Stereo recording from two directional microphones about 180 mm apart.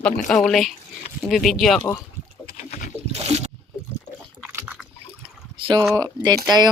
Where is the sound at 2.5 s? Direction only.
40° left (ahead or behind).